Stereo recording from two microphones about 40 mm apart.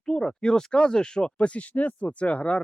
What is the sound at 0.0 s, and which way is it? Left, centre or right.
Speech, centre.